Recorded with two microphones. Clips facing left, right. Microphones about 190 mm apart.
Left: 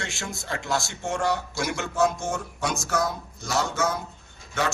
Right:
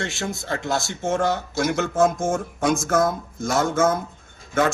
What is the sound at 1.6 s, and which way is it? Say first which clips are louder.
Speech: right 7 dB; 45° right (ahead or behind).